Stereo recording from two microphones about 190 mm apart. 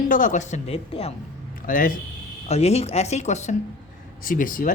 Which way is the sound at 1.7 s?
45° left (ahead or behind).